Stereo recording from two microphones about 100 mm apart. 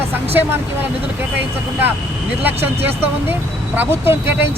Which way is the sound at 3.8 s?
20° right (ahead or behind).